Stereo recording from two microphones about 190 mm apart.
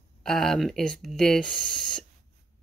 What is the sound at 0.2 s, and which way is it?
Speech, centre (ahead or behind).